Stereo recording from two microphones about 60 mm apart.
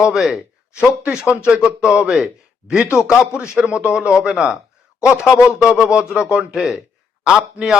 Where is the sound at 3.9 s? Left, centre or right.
Centre.